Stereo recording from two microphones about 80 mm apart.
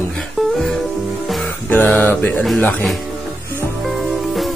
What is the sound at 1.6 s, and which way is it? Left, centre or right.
Mantra, centre.